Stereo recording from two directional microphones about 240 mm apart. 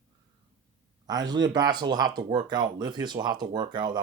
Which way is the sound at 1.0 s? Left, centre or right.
Centre.